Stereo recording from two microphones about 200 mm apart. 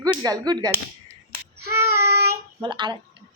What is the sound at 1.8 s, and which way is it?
Child singing, 55° right (ahead or behind).